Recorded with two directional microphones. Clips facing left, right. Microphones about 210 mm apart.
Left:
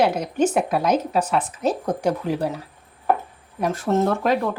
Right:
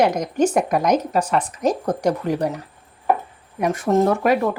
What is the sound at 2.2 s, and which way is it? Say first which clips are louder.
Speech: right 2 dB; 5° left (ahead or behind).